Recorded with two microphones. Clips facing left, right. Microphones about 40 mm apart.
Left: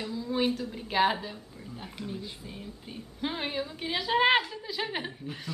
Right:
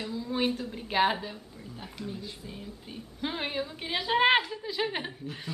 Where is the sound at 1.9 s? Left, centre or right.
Centre.